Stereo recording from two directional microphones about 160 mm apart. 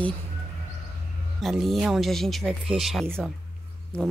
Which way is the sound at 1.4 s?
Centre (ahead or behind).